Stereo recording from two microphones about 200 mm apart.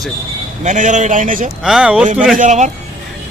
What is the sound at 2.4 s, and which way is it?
Speech, 35° right (ahead or behind).